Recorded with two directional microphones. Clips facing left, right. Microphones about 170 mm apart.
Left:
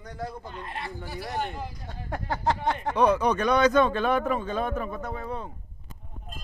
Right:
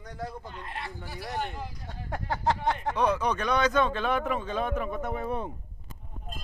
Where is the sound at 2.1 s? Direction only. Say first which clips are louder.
Left 1 dB; 15° right (ahead or behind).